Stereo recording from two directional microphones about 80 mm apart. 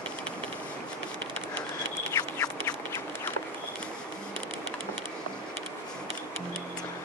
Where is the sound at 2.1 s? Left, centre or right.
Left.